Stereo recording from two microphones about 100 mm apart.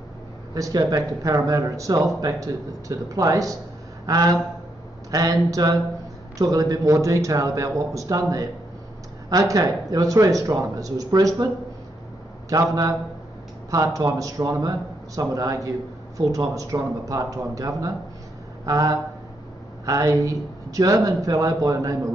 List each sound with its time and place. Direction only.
0.6 s speech: 40° right (ahead or behind)
12.5 s speech: 40° right (ahead or behind)